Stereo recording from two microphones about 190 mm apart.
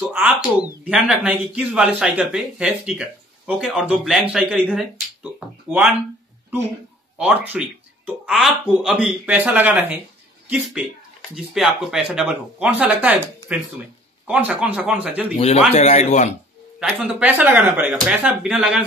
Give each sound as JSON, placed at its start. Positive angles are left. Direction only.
{"t": 0.1, "sound": "speech", "side_deg": -10}
{"t": 7.2, "sound": "speech", "side_deg": -5}
{"t": 14.2, "sound": "speech", "side_deg": -5}
{"t": 15.3, "sound": "a man's voice", "side_deg": 35}
{"t": 16.8, "sound": "speech", "side_deg": -5}